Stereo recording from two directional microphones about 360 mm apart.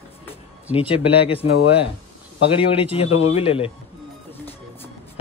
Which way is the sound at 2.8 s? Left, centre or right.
Centre.